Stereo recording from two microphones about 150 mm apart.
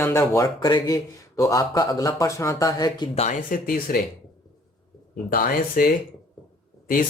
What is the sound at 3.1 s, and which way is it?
Speech, 55° left (ahead or behind).